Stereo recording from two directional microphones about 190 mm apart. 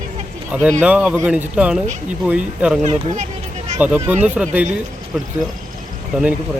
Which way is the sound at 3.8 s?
10° right (ahead or behind).